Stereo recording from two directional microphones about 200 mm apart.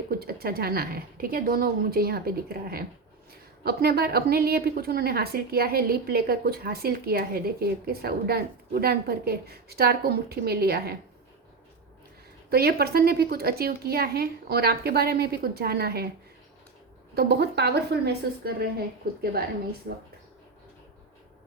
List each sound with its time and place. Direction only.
0.1 s a woman's voice: 50° right (ahead or behind)
12.5 s a woman's voice: 50° right (ahead or behind)
17.2 s a woman's voice: 55° right (ahead or behind)